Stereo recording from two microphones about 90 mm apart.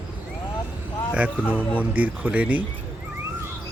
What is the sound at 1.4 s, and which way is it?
Speech, 15° left (ahead or behind).